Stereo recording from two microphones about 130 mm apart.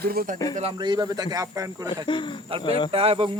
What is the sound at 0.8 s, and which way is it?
Speech, 35° right (ahead or behind).